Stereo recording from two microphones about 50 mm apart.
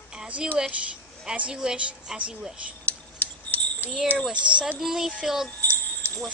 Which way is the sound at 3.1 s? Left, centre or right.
Left.